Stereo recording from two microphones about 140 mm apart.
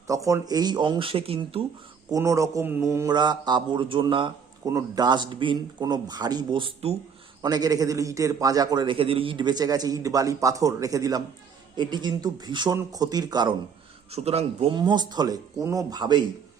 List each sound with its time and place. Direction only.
0.1 s speech: 25° right (ahead or behind); by 1.6 s 40° right (ahead or behind)
2.1 s a man's voice: 20° right (ahead or behind)
3.1 s speech: 30° right (ahead or behind)
7.4 s a man's voice: 30° right (ahead or behind)
14.1 s speech: 50° right (ahead or behind)
14.7 s a man's voice: 30° right (ahead or behind)